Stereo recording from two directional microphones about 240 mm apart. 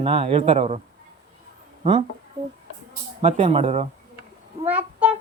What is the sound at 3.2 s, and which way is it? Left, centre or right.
Speech, right.